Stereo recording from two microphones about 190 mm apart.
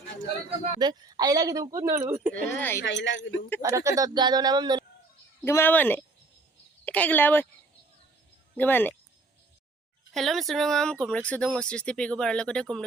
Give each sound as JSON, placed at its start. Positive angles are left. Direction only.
{"t": 0.8, "sound": "speech", "side_deg": -20}
{"t": 2.5, "sound": "speech", "side_deg": 10}
{"t": 2.8, "sound": "speech", "side_deg": 75}
{"t": 3.6, "sound": "speech", "side_deg": -15}
{"t": 5.4, "sound": "speech", "side_deg": 10}
{"t": 8.5, "sound": "speech", "side_deg": 10}
{"t": 10.1, "sound": "speech", "side_deg": 0}